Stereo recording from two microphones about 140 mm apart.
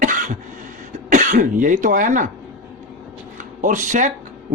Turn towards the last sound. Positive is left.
turn(degrees=-65)  # may be behind; listen again after turning